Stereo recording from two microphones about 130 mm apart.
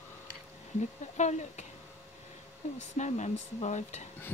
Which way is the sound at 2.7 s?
65° left (ahead or behind).